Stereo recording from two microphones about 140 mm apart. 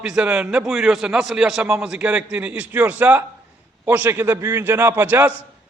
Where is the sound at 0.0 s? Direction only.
5° right (ahead or behind).